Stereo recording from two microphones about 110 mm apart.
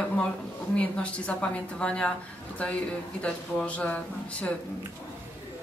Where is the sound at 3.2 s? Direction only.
10° left (ahead or behind).